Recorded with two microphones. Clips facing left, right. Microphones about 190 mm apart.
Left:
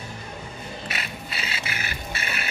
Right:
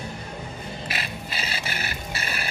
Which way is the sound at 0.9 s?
30° right (ahead or behind).